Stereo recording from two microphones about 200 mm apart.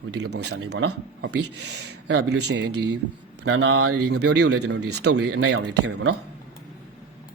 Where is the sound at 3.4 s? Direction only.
80° right.